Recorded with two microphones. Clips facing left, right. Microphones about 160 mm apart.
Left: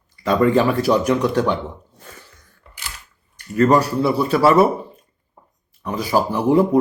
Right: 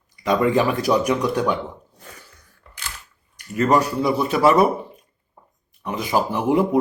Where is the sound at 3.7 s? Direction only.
20° right (ahead or behind).